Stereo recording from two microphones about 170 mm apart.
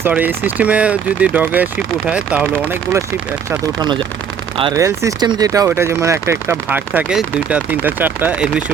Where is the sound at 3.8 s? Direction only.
25° right (ahead or behind); by 8.6 s 5° right (ahead or behind).